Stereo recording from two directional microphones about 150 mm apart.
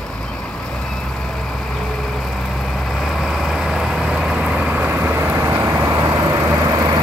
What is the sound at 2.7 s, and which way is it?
Vehicle, centre (ahead or behind).